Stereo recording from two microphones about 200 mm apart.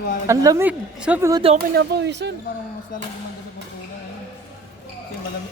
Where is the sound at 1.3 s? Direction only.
30° right (ahead or behind).